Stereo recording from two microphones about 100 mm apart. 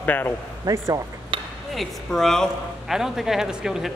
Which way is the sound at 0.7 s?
35° right (ahead or behind).